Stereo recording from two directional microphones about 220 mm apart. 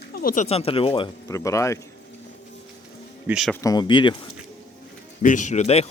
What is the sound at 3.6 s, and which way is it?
Speech, 20° left (ahead or behind).